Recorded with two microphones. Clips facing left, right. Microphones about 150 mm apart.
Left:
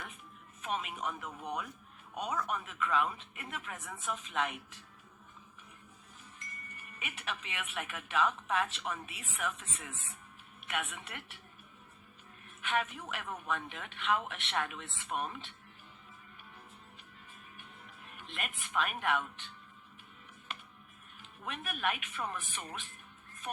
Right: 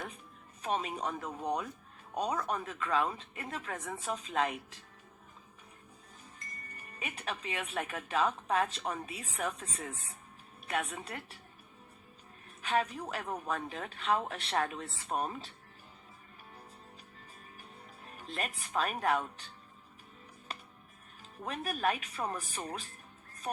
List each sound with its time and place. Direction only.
0.6 s speech: 35° right (ahead or behind)
6.4 s speech: 35° right (ahead or behind)
12.6 s speech: 35° right (ahead or behind)
17.6 s speech: 35° right (ahead or behind)
21.2 s speech: 35° right (ahead or behind)